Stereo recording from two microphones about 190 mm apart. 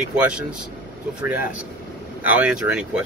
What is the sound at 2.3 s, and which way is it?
Speech, 5° right (ahead or behind).